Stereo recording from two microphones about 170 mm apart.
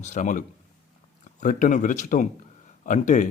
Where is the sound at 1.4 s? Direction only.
50° left (ahead or behind).